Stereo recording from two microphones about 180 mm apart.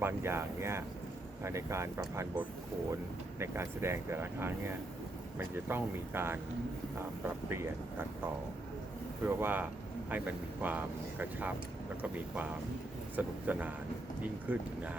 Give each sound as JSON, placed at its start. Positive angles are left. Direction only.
{"t": 0.0, "sound": "speech", "side_deg": -15}
{"t": 3.3, "sound": "speech", "side_deg": -15}
{"t": 7.5, "sound": "speech", "side_deg": -15}
{"t": 9.2, "sound": "speech", "side_deg": -10}